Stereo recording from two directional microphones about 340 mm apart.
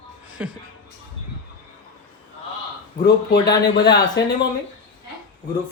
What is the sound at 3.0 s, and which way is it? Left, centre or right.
Speech, left.